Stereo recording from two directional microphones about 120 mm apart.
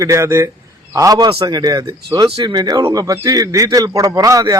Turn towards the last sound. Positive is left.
turn(degrees=-30)  # may be behind; listen again after turning